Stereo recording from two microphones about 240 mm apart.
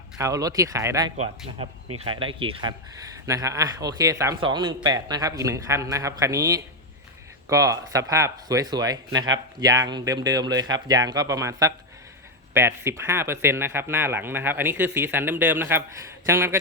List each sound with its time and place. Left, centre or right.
0.2 s a man's voice: centre